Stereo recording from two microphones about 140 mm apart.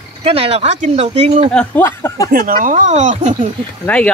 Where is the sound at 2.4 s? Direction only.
80° right; by 3.3 s 60° right (ahead or behind).